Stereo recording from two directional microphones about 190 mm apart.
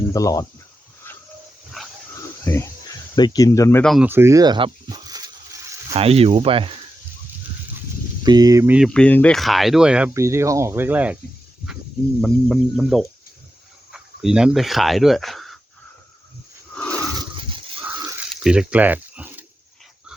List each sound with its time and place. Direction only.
0.1 s speech: 15° left (ahead or behind)
2.4 s speech: 10° left (ahead or behind)
3.8 s speech: centre (ahead or behind)
4.1 s speech: 15° right (ahead or behind)
5.9 s speech: 30° right (ahead or behind)
8.2 s speech: 20° right (ahead or behind)
8.9 s speech: 5° left (ahead or behind)
10.2 s speech: 15° right (ahead or behind)
12.2 s speech: centre (ahead or behind)
16.7 s a sound: 5° left (ahead or behind)
17.2 s a sound: 25° right (ahead or behind)
18.3 s a sound: 5° right (ahead or behind)